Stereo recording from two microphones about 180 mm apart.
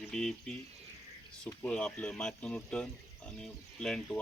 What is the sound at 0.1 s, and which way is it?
Speech, 5° left (ahead or behind).